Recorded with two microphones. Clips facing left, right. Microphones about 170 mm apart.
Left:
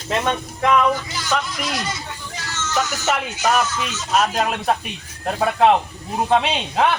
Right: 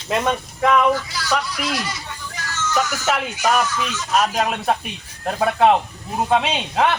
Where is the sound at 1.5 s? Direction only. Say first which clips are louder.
Right 1 dB; 20° left (ahead or behind).